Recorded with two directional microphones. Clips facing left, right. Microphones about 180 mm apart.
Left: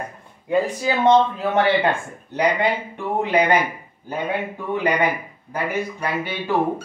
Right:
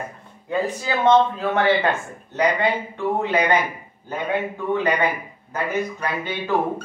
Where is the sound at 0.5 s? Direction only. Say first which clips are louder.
Left 3 dB; 15° left (ahead or behind).